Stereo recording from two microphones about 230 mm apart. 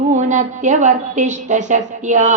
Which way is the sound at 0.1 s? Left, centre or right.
Right.